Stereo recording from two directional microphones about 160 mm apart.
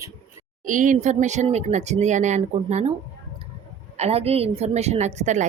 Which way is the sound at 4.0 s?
40° right (ahead or behind).